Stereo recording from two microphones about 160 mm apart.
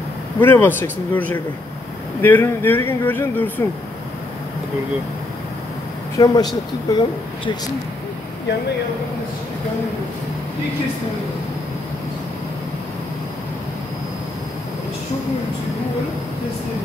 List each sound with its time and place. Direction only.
0.4 s speech: 15° left (ahead or behind)
6.1 s speech: 25° left (ahead or behind)